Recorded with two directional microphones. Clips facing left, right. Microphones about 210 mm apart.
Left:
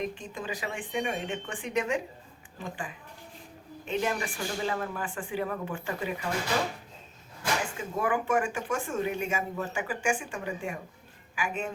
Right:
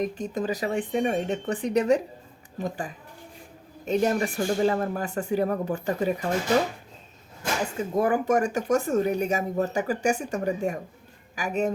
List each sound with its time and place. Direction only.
0.0 s speech: 40° right (ahead or behind)
7.6 s speech: 40° right (ahead or behind)